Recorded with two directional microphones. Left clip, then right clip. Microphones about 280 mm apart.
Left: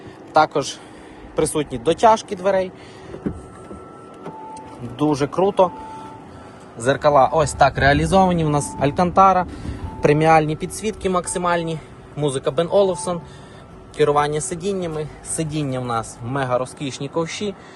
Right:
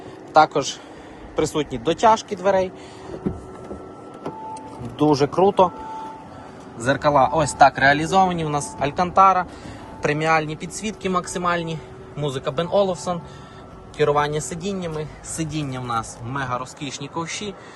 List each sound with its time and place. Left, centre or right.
0.3 s speech: centre
4.5 s a sound: centre
6.7 s speech: centre